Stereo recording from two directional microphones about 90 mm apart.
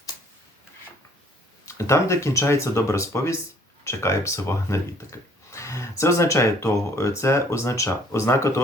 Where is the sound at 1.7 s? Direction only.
35° left (ahead or behind).